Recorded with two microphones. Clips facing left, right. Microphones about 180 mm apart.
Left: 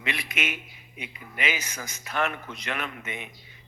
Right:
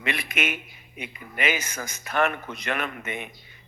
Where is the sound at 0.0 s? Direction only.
55° right (ahead or behind).